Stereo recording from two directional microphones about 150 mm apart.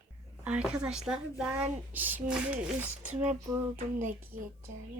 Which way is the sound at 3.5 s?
20° right (ahead or behind).